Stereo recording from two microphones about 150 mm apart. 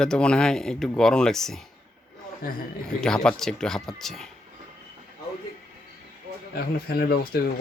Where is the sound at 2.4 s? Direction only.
80° left.